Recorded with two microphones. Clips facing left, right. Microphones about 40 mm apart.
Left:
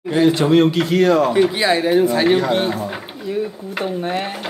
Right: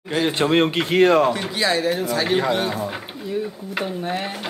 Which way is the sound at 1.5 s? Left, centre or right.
Centre.